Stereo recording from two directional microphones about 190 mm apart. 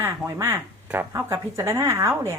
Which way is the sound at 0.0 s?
15° right (ahead or behind).